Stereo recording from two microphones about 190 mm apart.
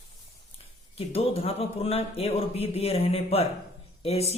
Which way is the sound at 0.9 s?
30° left (ahead or behind).